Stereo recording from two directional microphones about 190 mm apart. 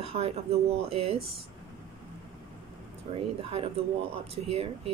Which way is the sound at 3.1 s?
30° right (ahead or behind).